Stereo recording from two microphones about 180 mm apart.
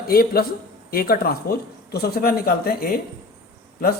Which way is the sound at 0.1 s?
55° left (ahead or behind).